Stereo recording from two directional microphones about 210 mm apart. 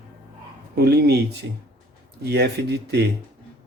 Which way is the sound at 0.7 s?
50° right (ahead or behind).